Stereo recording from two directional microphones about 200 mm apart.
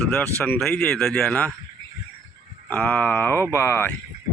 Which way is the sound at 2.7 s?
10° left (ahead or behind).